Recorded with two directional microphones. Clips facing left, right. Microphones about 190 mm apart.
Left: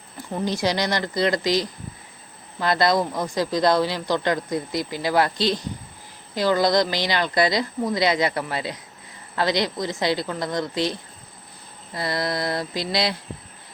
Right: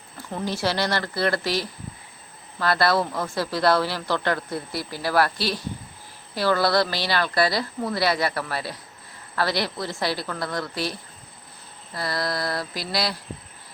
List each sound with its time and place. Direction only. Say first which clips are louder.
0.3 s speech: left 2 dB; 15° left (ahead or behind)
11.9 s speech: left 2 dB; 20° left (ahead or behind)